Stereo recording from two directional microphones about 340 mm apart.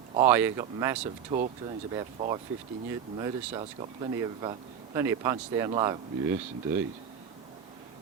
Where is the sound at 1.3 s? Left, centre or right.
Right.